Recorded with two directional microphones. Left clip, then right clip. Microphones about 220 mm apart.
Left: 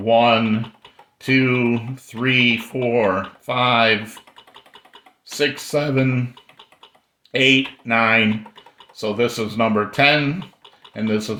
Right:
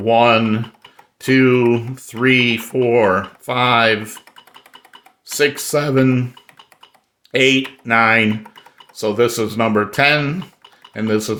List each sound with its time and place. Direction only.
0.0 s speech: 40° right (ahead or behind)
5.2 s speech: 40° right (ahead or behind)
7.3 s speech: 40° right (ahead or behind)